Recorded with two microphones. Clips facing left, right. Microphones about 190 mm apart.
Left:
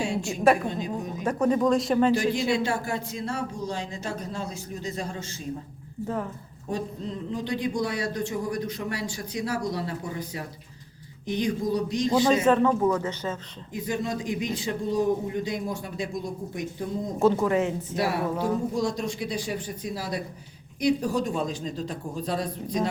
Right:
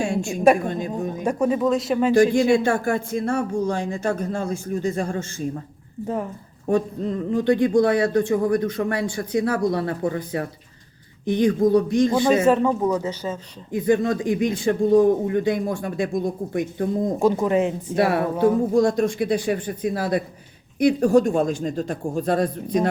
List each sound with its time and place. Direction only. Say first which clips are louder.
0.0 s a sound: right 4 dB; 50° right (ahead or behind)
1.2 s speech: right 2 dB; 10° right (ahead or behind)
2.1 s speech: right 8 dB; 50° right (ahead or behind)
6.7 s speech: right 9 dB; 55° right (ahead or behind)
12.3 s speech: right 3 dB; 10° right (ahead or behind)
13.7 s speech: right 9 dB; 55° right (ahead or behind)
17.2 s speech: right 1 dB; 15° right (ahead or behind)
17.9 s speech: right 7 dB; 55° right (ahead or behind)